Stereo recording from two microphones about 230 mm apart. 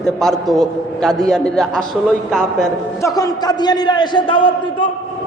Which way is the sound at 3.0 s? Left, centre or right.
Centre.